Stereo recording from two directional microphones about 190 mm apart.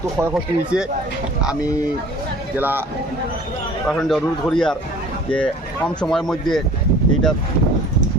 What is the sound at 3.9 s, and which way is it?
Speech, centre (ahead or behind).